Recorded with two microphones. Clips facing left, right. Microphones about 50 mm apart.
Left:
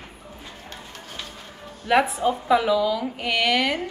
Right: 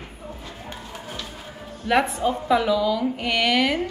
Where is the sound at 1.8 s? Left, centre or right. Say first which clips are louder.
Left 1 dB; centre.